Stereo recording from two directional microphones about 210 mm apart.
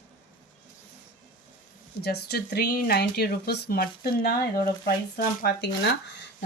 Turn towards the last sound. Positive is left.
turn(degrees=55)  # may be behind; listen again after turning